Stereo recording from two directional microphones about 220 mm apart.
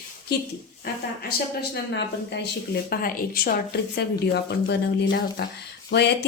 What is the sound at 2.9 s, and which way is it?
Speech, 45° left (ahead or behind).